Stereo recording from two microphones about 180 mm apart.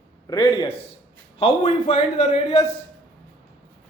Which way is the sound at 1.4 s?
40° left (ahead or behind).